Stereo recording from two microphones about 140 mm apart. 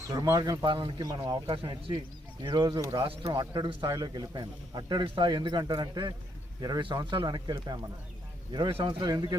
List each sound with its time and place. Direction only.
0.1 s a man's voice: 25° right (ahead or behind)